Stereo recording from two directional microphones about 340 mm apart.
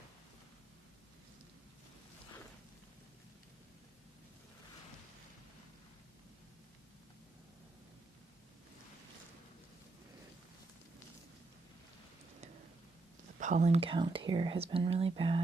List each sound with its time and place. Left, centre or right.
13.4 s speech: right